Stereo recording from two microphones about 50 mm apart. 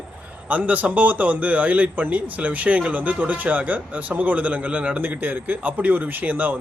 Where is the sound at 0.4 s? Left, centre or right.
Right.